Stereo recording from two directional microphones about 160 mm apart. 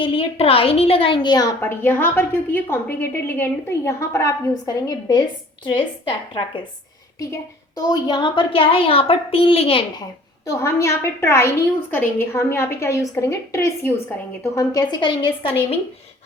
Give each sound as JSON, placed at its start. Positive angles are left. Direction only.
{"t": 0.0, "sound": "a woman's voice", "side_deg": 35}
{"t": 1.6, "sound": "a woman's voice", "side_deg": 15}
{"t": 7.8, "sound": "a woman's voice", "side_deg": 25}
{"t": 10.4, "sound": "a woman's voice", "side_deg": 20}